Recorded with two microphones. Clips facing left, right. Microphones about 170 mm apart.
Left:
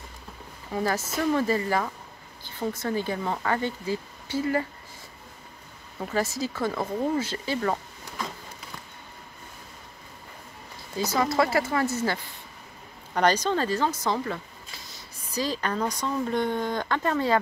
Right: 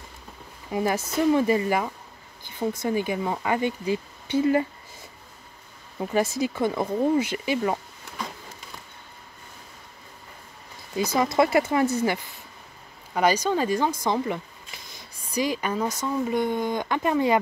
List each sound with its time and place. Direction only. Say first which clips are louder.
0.7 s speech: right 2 dB; 15° right (ahead or behind)
6.0 s speech: right 4 dB; 20° right (ahead or behind)
11.3 s speech: right 6 dB; 20° right (ahead or behind)